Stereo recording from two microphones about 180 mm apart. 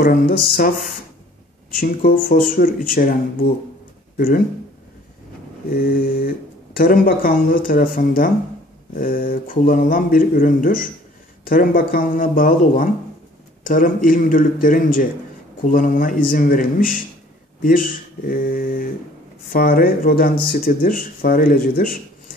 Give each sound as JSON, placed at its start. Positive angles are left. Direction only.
{"t": 0.0, "sound": "speech", "side_deg": 55}
{"t": 1.7, "sound": "speech", "side_deg": 55}
{"t": 5.7, "sound": "speech", "side_deg": 55}